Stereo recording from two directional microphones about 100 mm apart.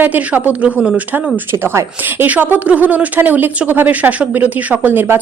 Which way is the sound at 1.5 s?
25° right (ahead or behind).